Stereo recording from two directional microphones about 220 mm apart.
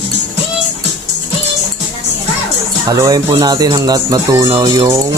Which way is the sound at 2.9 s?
15° right (ahead or behind).